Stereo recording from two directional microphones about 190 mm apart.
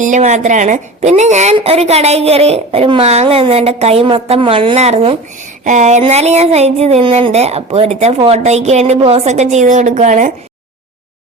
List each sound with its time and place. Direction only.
0.0 s a woman's voice: 40° right (ahead or behind)